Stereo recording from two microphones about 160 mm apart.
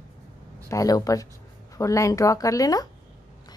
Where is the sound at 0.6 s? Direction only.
20° left (ahead or behind).